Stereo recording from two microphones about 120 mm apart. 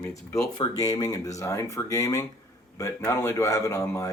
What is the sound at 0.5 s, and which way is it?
Speech, 35° left (ahead or behind).